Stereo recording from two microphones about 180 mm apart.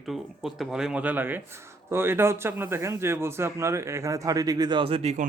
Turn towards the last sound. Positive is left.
turn(degrees=-40)  # may be behind; listen again after turning